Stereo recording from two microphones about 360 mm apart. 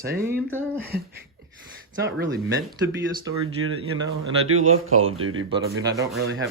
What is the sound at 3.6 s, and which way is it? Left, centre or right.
Speech, right.